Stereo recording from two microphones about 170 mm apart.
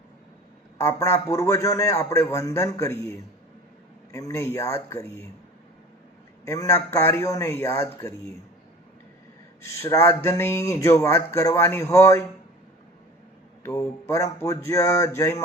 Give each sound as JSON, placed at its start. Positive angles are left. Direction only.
{"t": 0.8, "sound": "speech", "side_deg": 15}
{"t": 6.4, "sound": "speech", "side_deg": 20}
{"t": 9.6, "sound": "speech", "side_deg": 20}
{"t": 13.6, "sound": "speech", "side_deg": 15}